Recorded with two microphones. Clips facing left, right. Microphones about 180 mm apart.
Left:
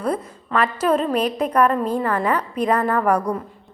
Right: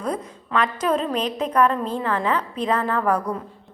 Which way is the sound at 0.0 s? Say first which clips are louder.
Left 3 dB; 5° left (ahead or behind).